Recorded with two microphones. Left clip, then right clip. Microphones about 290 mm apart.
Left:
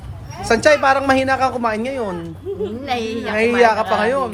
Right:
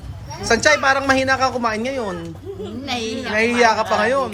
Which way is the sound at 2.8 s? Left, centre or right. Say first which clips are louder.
Right 1 dB; left.